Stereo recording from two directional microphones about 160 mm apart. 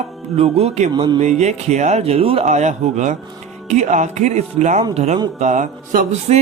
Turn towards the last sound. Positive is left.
turn(degrees=-45)  # may be behind; listen again after turning